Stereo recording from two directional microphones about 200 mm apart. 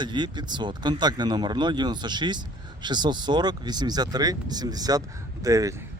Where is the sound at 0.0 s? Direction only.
20° right (ahead or behind).